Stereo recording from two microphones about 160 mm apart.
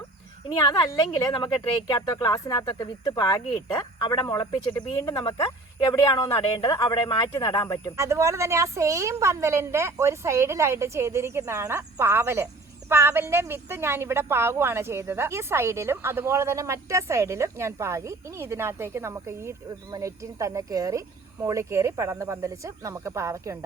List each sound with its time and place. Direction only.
0.4 s speech: 25° left (ahead or behind)
7.9 s speech: 20° right (ahead or behind)